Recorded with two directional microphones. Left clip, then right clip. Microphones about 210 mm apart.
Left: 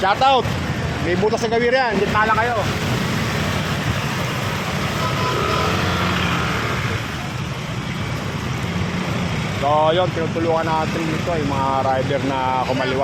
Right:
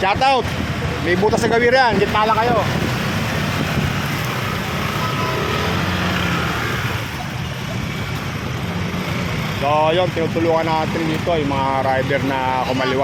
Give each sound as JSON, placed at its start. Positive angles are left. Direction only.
{"t": 0.0, "sound": "speech", "side_deg": 0}
{"t": 1.3, "sound": "speech", "side_deg": -15}
{"t": 9.6, "sound": "speech", "side_deg": -5}